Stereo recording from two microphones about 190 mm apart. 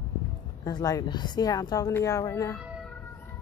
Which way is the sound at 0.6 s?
20° left (ahead or behind).